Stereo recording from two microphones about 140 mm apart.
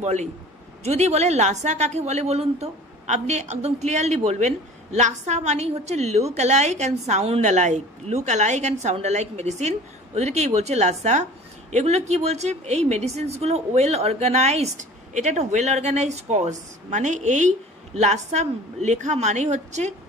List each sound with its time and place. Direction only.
0.0 s a woman's voice: 55° right (ahead or behind)